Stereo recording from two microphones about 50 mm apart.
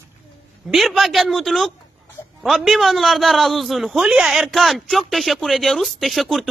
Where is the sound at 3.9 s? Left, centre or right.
Centre.